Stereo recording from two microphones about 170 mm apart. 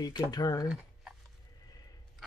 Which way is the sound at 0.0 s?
20° left (ahead or behind).